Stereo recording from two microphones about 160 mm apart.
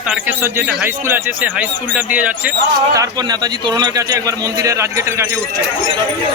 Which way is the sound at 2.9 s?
25° right (ahead or behind).